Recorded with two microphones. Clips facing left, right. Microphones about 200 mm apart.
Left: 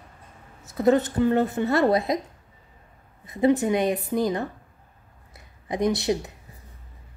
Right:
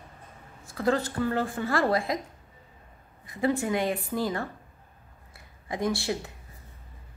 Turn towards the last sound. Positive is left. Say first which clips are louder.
# left 5 dB
turn(degrees=20)  # may be behind; listen again after turning